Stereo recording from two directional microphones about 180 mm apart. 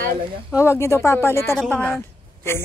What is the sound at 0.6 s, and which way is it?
A woman's voice, 15° left (ahead or behind).